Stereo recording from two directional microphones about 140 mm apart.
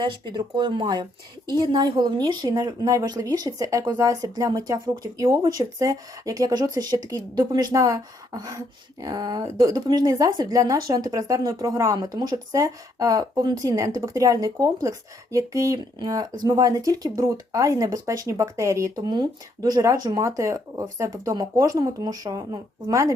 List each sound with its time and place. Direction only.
0.0 s speech: 30° right (ahead or behind)